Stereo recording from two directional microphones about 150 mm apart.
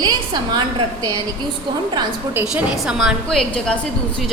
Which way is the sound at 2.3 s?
10° right (ahead or behind).